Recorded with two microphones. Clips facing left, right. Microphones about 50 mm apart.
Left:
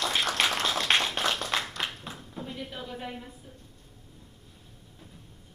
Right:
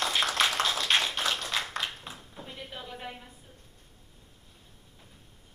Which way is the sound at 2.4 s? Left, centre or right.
Centre.